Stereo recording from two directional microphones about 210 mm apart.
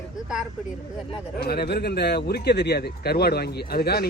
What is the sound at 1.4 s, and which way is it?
Speech, 50° left (ahead or behind).